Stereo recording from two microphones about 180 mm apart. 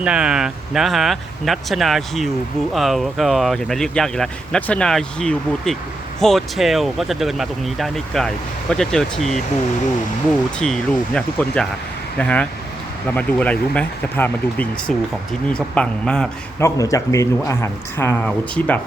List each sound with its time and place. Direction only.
0.0 s speech: 5° right (ahead or behind)
10.6 s speech: 5° left (ahead or behind)
16.6 s speech: 20° left (ahead or behind)